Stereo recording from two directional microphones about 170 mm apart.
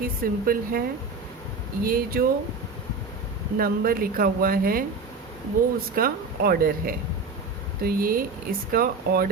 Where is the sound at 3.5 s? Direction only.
60° right (ahead or behind).